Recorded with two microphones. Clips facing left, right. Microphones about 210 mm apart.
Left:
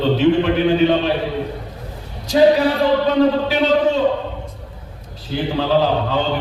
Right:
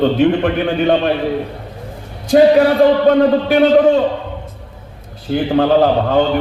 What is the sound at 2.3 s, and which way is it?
A man's voice, 55° right (ahead or behind).